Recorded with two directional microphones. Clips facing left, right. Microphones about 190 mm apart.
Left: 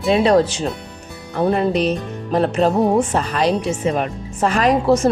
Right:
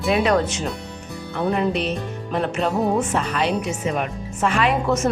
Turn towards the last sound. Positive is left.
turn(degrees=35)  # may be behind; listen again after turning